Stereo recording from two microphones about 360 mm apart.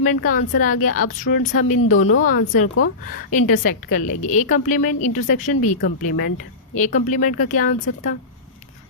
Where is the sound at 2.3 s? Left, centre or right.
Left.